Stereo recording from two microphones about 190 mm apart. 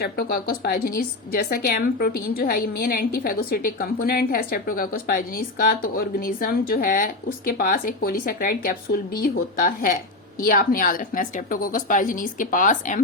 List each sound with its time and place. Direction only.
0.0 s a woman's voice: 50° left (ahead or behind)